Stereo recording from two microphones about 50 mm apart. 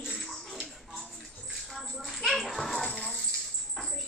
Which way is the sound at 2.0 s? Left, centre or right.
Centre.